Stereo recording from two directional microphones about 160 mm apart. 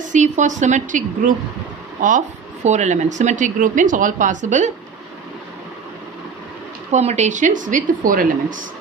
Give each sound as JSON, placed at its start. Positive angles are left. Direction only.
{"t": 0.0, "sound": "speech", "side_deg": -50}
{"t": 6.9, "sound": "speech", "side_deg": -45}